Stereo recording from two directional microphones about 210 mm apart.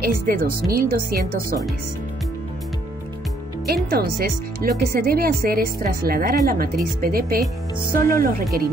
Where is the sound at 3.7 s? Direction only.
45° right (ahead or behind).